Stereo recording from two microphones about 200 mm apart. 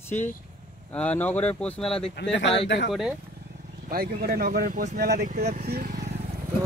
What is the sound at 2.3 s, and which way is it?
Speech, 65° left (ahead or behind).